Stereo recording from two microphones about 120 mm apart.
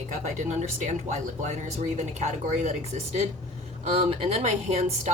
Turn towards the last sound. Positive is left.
turn(degrees=-70)  # may be behind; listen again after turning